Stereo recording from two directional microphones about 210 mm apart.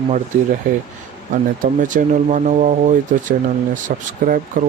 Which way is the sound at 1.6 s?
40° right (ahead or behind).